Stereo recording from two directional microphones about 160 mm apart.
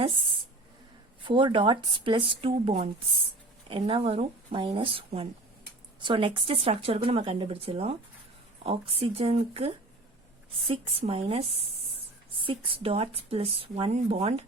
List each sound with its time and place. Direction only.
1.2 s speech: 30° right (ahead or behind)
12.5 s speech: 35° right (ahead or behind)